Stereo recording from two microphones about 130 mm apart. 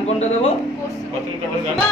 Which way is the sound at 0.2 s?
55° left (ahead or behind).